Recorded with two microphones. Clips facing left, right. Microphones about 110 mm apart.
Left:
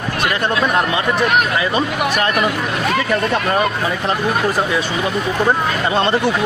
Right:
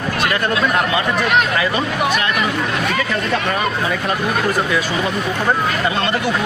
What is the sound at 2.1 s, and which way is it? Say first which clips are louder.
Speech: left 2 dB; 45° left (ahead or behind).